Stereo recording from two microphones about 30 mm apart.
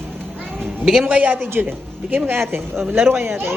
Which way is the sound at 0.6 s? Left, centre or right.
Centre.